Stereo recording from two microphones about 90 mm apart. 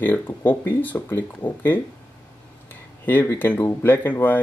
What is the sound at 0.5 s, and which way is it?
Speech, 20° left (ahead or behind).